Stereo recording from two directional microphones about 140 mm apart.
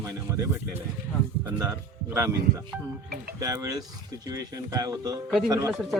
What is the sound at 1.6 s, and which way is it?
Speech, 15° right (ahead or behind).